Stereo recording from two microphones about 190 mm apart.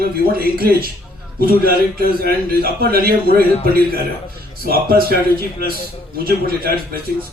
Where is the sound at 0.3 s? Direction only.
50° right (ahead or behind).